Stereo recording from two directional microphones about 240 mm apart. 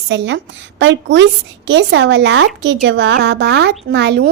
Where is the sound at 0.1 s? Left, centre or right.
Right.